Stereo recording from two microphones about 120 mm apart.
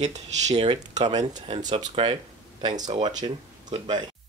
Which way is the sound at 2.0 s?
45° right (ahead or behind).